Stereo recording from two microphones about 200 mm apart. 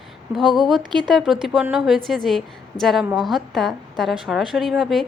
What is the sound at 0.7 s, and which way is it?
Speech, 20° right (ahead or behind).